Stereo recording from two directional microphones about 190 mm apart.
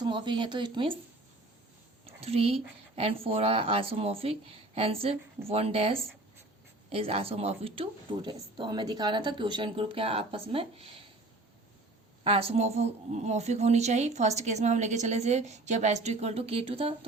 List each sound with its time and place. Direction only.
0.0 s speech: 25° right (ahead or behind)
2.0 s a woman's voice: 30° right (ahead or behind)
12.2 s a woman's voice: 30° right (ahead or behind)